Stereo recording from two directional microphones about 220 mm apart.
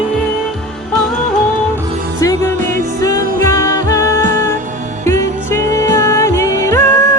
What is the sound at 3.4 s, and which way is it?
Music, 15° left (ahead or behind).